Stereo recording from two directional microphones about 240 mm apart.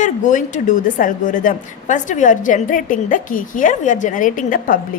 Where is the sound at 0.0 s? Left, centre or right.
Left.